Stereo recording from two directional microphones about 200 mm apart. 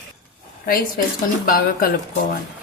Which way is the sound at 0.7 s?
45° left (ahead or behind).